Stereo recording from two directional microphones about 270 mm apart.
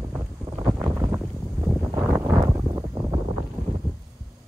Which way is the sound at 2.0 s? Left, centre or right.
Centre.